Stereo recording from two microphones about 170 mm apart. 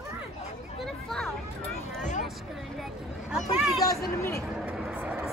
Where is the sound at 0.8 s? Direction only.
Centre (ahead or behind).